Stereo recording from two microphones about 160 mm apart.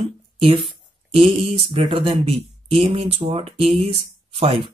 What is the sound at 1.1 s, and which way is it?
Speech, 35° right (ahead or behind).